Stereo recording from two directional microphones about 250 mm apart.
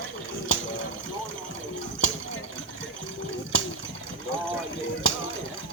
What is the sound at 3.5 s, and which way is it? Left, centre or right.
Water, right.